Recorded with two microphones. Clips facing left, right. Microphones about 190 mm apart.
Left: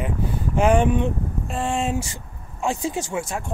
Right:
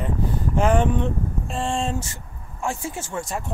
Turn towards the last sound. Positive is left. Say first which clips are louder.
# left 2 dB
turn(degrees=0)  # may be behind; listen again after turning